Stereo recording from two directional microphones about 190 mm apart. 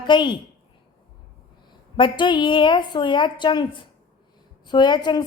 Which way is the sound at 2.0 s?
25° left (ahead or behind).